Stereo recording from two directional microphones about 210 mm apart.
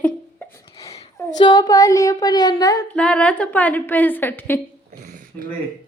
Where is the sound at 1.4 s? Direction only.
20° left (ahead or behind).